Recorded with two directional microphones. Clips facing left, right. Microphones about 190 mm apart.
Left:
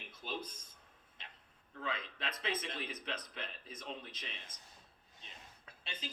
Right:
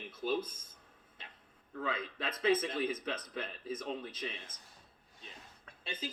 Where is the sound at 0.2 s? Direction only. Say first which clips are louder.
Right 9 dB; 45° right (ahead or behind).